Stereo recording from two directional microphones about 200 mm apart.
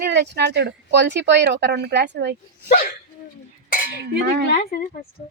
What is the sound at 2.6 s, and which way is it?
Speech, 45° left (ahead or behind).